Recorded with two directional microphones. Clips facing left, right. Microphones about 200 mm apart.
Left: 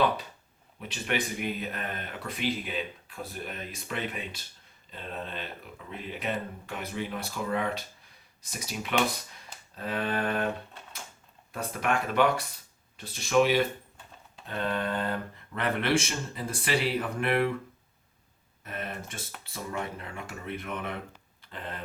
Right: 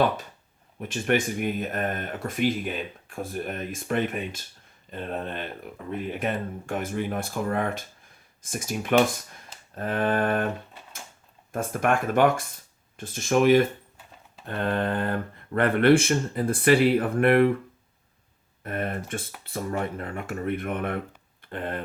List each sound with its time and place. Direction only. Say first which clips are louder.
0.8 s speech: right 7 dB; 50° right (ahead or behind)
11.5 s speech: right 5 dB; 50° right (ahead or behind)
18.6 s speech: right 7 dB; 55° right (ahead or behind)